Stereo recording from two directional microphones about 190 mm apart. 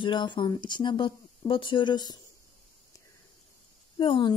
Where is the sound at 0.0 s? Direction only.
25° left (ahead or behind).